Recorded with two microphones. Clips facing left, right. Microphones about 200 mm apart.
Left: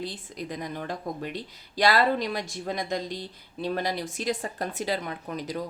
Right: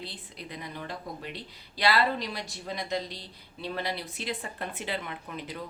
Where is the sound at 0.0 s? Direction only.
45° left (ahead or behind).